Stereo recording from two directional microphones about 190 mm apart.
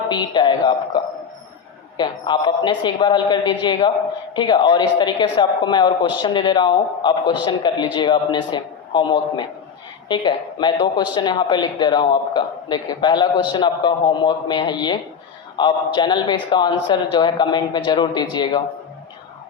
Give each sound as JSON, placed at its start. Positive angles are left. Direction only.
{"t": 0.1, "sound": "speech", "side_deg": 25}